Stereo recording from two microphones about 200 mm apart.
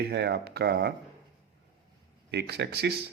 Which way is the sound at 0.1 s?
55° right (ahead or behind).